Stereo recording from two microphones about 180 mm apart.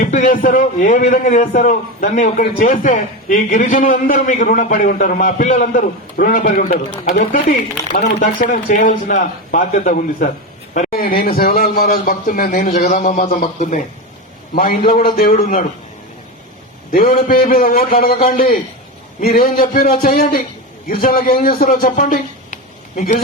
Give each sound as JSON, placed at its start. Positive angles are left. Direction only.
{"t": 0.0, "sound": "a man's voice", "side_deg": 50}
{"t": 14.5, "sound": "a man's voice", "side_deg": 55}
{"t": 16.9, "sound": "a man's voice", "side_deg": 55}